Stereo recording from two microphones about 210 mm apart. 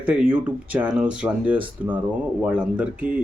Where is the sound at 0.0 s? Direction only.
5° right (ahead or behind).